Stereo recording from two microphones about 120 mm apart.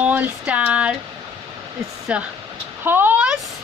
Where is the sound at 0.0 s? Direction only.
10° right (ahead or behind).